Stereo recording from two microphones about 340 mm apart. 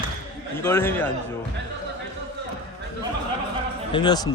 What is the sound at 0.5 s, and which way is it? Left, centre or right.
Speech, centre.